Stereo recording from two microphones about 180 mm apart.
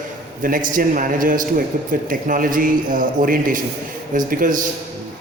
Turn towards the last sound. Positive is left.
turn(degrees=-45)  # may be behind; listen again after turning